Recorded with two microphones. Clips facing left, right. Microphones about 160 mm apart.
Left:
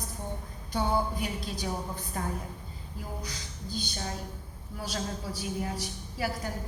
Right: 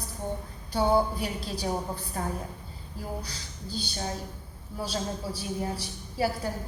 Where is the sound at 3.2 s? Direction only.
30° right (ahead or behind).